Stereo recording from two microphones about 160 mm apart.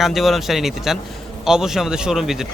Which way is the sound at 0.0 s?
Centre (ahead or behind).